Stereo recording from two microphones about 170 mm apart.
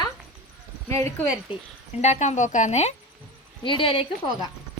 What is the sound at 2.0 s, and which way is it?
Speech, 40° left (ahead or behind).